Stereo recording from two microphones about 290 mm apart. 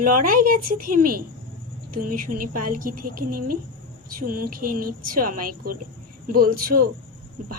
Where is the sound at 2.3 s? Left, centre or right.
Right.